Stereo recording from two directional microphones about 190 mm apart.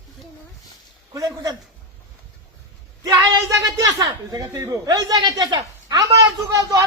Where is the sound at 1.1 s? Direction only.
20° right (ahead or behind).